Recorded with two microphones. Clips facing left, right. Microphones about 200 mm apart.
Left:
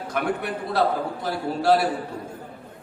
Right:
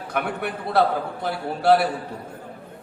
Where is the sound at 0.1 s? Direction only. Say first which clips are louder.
Left 1 dB; 60° right (ahead or behind).